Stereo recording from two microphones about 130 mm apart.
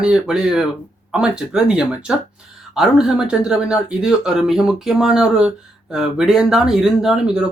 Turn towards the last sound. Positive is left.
turn(degrees=-5)  # may be behind; listen again after turning